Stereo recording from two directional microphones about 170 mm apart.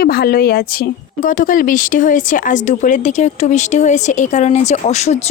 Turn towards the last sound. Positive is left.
turn(degrees=40)  # may be behind; listen again after turning